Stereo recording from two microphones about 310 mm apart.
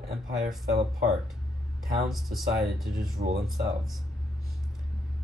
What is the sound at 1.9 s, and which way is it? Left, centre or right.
Speech, centre.